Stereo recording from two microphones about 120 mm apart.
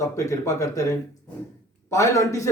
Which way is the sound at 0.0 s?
25° left (ahead or behind).